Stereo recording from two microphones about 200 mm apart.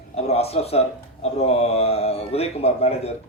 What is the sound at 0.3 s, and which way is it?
Speech, 30° left (ahead or behind).